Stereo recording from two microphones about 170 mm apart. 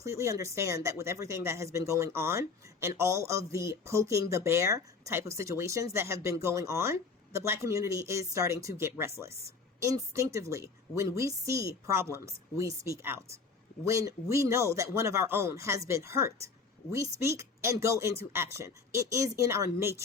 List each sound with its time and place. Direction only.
0.0 s speech: 20° right (ahead or behind)